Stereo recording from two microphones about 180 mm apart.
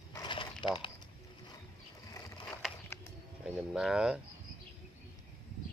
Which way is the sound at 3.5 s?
5° right (ahead or behind).